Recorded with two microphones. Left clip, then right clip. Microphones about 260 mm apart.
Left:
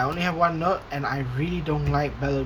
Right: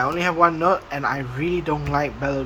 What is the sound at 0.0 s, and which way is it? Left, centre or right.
Speech, centre.